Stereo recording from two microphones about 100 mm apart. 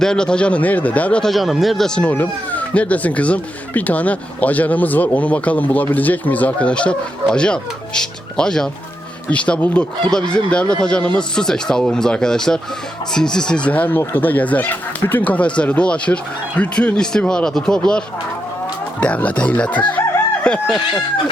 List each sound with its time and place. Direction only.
0.0 s speech: 10° left (ahead or behind)
2.0 s speech: 15° left (ahead or behind)